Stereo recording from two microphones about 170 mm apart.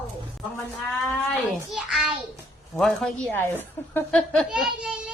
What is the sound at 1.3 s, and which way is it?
A child's voice, centre (ahead or behind).